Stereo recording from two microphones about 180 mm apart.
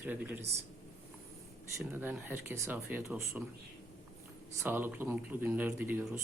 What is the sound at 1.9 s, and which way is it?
Speech, 10° right (ahead or behind).